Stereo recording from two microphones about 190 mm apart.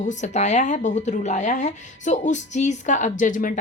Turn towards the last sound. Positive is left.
turn(degrees=45)  # may be behind; listen again after turning